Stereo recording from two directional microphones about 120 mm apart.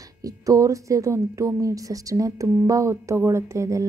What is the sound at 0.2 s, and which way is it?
A woman's voice, 30° right (ahead or behind).